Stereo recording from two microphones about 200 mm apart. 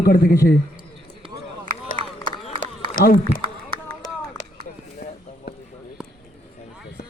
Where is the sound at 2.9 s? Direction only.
40° left (ahead or behind).